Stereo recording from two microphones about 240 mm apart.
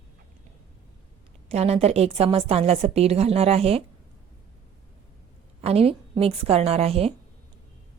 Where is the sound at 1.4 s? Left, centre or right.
Right.